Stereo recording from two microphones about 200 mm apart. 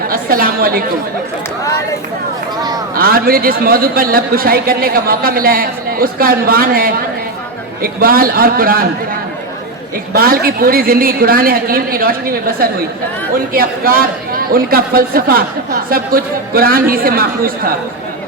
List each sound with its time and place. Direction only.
0.1 s a woman's voice: 45° right (ahead or behind)
2.9 s a man's voice: 45° right (ahead or behind)
10.1 s a man's voice: 45° right (ahead or behind)